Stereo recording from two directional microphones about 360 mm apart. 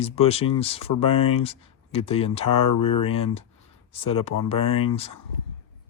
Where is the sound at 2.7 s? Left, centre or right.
Left.